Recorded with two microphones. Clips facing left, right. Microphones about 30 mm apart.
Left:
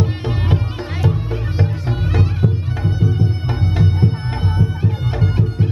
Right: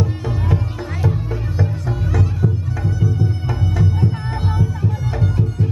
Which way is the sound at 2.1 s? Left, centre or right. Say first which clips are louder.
Left 1 dB; left.